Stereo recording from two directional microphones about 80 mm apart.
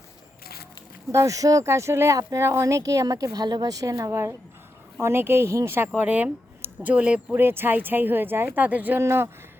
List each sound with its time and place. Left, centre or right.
1.1 s speech: right
6.0 s speech: centre
7.3 s speech: right
9.0 s speech: right